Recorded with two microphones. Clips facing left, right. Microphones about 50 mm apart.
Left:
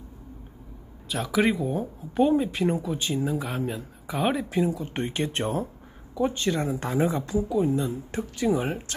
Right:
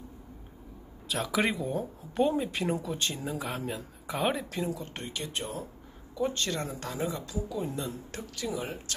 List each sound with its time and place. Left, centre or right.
1.0 s speech: centre
4.9 s speech: left
6.1 s speech: centre
6.8 s speech: left
7.5 s speech: centre
8.1 s speech: left